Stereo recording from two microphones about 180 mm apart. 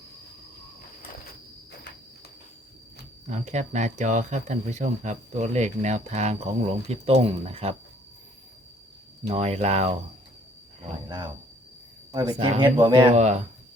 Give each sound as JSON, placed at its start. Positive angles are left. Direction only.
{"t": 3.2, "sound": "speech", "side_deg": -40}
{"t": 9.3, "sound": "speech", "side_deg": -35}
{"t": 12.3, "sound": "speech", "side_deg": -25}
{"t": 13.1, "sound": "speech", "side_deg": -40}